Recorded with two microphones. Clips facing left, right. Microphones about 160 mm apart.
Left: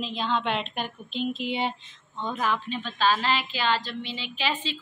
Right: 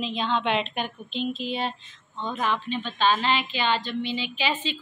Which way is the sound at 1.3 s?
15° left (ahead or behind).